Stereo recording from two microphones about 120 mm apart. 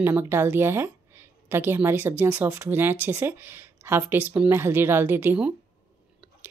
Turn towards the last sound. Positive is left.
turn(degrees=-20)  # may be behind; listen again after turning